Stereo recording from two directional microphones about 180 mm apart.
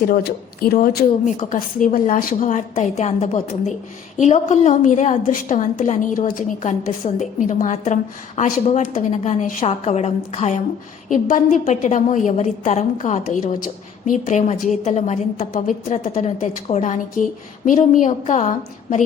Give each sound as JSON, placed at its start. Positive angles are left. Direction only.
{"t": 0.0, "sound": "a woman's voice", "side_deg": 55}
{"t": 1.2, "sound": "a woman's voice", "side_deg": 45}